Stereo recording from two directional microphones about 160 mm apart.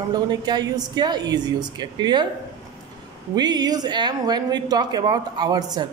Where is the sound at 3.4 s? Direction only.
25° right (ahead or behind).